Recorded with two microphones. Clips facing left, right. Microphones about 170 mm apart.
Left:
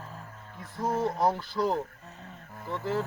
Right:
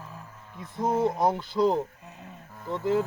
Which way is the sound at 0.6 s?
20° right (ahead or behind).